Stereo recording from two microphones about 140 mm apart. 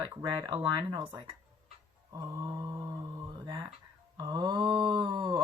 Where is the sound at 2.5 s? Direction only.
25° right (ahead or behind).